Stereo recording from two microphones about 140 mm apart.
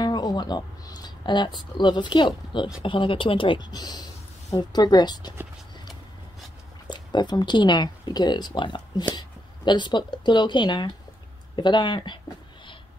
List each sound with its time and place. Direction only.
0.0 s speech: 30° left (ahead or behind)
6.9 s speech: 30° left (ahead or behind)